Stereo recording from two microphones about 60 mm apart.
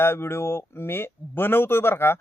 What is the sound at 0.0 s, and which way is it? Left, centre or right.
Speech, left.